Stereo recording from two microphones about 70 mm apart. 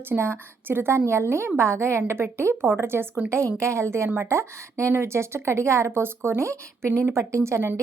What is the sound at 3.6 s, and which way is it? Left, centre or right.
A woman's voice, right.